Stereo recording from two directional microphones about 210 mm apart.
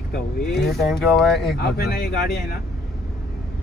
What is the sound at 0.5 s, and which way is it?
Speech, centre (ahead or behind).